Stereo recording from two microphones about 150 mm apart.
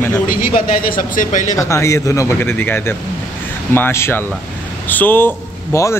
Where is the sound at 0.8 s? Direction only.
65° left (ahead or behind).